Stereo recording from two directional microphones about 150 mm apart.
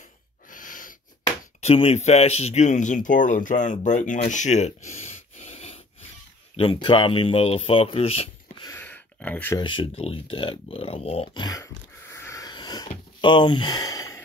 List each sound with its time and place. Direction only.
0.5 s speech: 65° left (ahead or behind); by 8.3 s 45° left (ahead or behind)
8.7 s a sound: 10° left (ahead or behind)
9.6 s speech: 35° left (ahead or behind)
11.4 s sniff: 20° left (ahead or behind)